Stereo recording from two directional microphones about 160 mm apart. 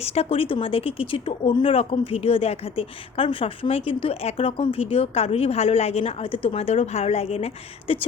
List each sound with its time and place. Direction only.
0.0 s speech: 40° left (ahead or behind)